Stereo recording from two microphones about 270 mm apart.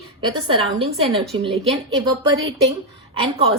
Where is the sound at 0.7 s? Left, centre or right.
Right.